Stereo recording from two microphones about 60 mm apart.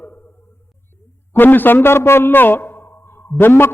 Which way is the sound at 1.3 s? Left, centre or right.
Left.